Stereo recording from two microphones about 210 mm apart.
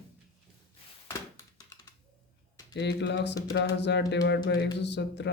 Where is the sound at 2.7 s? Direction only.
55° left (ahead or behind).